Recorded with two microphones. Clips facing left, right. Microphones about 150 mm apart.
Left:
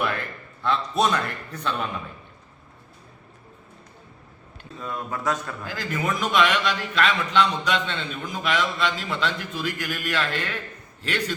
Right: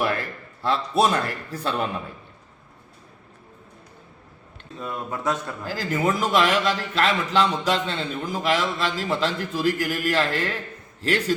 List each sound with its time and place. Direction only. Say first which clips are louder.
0.8 s a man's voice: right 4 dB; 10° right (ahead or behind)
1.1 s a man's voice: right 2 dB; 30° right (ahead or behind)
4.8 s a man's voice: right 1 dB; 20° right (ahead or behind); by 11.3 s 35° right (ahead or behind)